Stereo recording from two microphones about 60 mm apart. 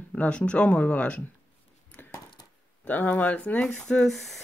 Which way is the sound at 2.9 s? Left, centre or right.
Left.